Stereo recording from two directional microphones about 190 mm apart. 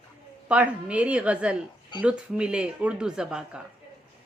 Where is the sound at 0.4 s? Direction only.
5° right (ahead or behind).